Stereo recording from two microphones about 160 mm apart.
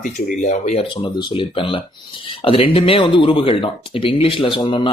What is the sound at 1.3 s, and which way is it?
Speech, 35° left (ahead or behind).